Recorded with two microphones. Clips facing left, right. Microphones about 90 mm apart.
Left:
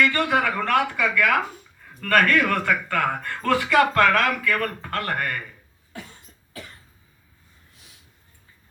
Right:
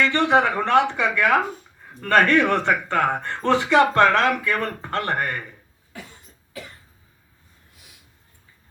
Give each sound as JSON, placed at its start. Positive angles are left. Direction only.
{"t": 0.0, "sound": "speech", "side_deg": -25}